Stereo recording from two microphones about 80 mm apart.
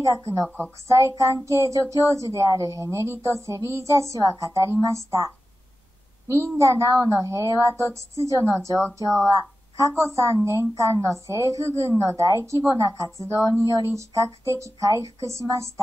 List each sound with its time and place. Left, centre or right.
0.1 s a woman's voice: right